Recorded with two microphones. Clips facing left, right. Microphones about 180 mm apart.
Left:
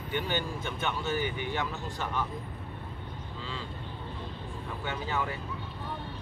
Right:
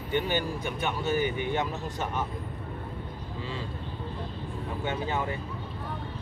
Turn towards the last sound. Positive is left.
turn(degrees=-20)  # may be behind; listen again after turning